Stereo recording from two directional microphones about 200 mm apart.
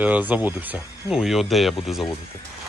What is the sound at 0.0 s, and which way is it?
Speech, 10° right (ahead or behind).